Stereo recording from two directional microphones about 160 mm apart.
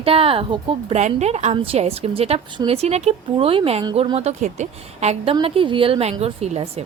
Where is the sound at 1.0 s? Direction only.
45° right (ahead or behind).